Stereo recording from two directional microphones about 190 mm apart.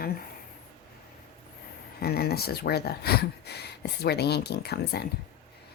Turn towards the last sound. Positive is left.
turn(degrees=60)  # may be behind; listen again after turning